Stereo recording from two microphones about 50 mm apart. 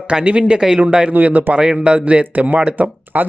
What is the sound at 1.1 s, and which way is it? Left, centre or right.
Speech, right.